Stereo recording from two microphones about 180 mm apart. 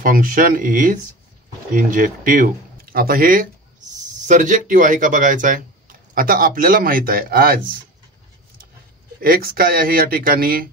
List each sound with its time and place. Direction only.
0.0 s speech: 50° right (ahead or behind)
9.2 s speech: 55° right (ahead or behind)